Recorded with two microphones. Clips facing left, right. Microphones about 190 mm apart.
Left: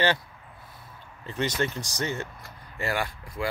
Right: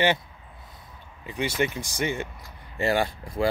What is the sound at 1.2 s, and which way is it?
Speech, 10° right (ahead or behind).